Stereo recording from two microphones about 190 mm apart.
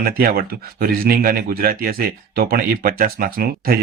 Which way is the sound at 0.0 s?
50° right (ahead or behind).